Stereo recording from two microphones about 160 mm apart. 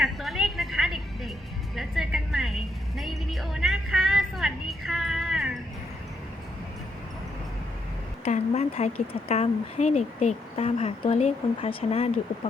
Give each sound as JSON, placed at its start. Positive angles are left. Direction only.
{"t": 0.0, "sound": "music", "side_deg": 0}
{"t": 8.2, "sound": "a sound", "side_deg": 40}
{"t": 9.3, "sound": "speech", "side_deg": 40}